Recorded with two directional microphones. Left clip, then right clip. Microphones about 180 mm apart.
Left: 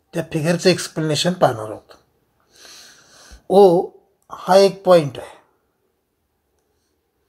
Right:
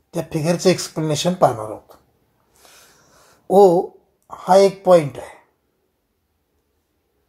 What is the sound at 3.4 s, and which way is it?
Speech, 15° left (ahead or behind).